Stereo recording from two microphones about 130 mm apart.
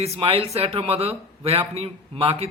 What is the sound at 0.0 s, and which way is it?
A man's voice, 50° right (ahead or behind).